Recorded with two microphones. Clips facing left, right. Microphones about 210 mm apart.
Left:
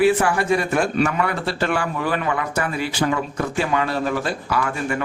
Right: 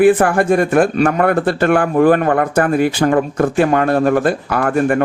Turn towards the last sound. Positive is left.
turn(degrees=-55)  # may be behind; listen again after turning